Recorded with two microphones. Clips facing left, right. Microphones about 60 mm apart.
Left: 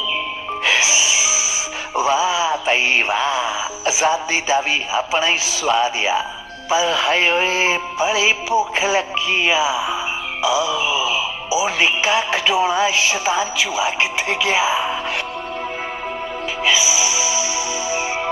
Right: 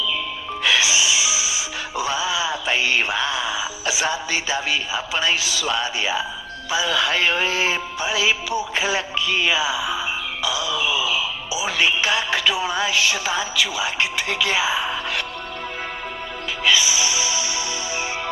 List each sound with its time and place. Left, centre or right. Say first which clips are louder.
0.6 s music: left 1 dB; left
2.0 s mantra: left 6 dB; left
6.7 s music: left 4 dB; left
16.6 s music: left 1 dB; centre